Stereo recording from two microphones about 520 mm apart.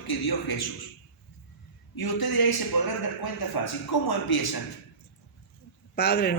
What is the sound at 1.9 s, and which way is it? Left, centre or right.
Speech, left.